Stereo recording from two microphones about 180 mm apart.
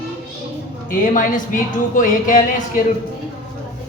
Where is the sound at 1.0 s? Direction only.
45° left (ahead or behind).